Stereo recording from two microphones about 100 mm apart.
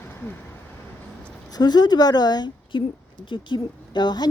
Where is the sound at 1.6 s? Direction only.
45° left (ahead or behind).